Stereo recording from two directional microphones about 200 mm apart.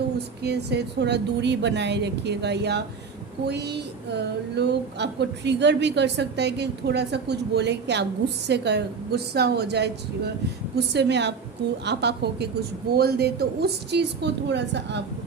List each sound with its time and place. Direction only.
0.4 s speech: 55° right (ahead or behind)